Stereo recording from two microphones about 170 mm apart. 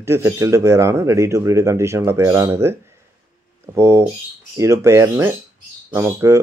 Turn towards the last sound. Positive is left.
turn(degrees=-15)  # may be behind; listen again after turning